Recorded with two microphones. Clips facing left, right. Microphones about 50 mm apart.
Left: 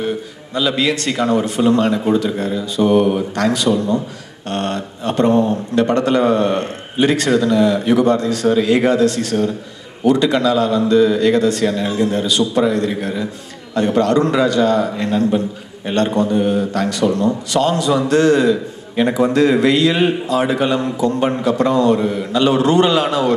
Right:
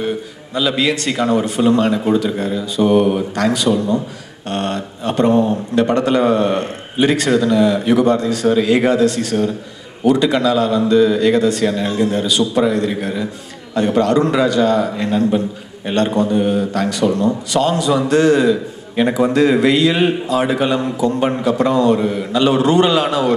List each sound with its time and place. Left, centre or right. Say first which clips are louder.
0.6 s speech: even; centre
1.1 s speech: even; centre
1.4 s speech: even; centre
7.2 s a man's voice: even; centre
20.0 s speech: even; centre